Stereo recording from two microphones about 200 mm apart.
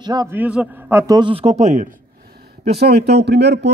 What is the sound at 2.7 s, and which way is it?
Speech, 55° right (ahead or behind).